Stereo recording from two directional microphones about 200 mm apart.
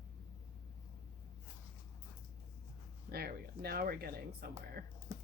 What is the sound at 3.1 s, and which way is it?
Speech, 50° right (ahead or behind).